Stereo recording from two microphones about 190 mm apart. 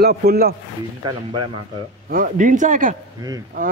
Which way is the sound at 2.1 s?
45° right (ahead or behind).